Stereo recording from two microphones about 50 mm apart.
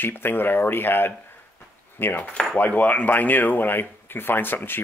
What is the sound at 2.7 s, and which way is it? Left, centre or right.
Speech, left.